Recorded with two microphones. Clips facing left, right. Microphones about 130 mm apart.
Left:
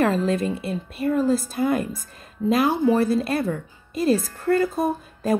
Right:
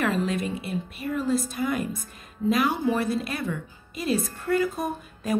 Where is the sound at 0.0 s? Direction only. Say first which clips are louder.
Left 5 dB; 35° left (ahead or behind).